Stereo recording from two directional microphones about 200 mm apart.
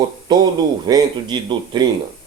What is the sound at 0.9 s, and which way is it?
Speech, 20° right (ahead or behind).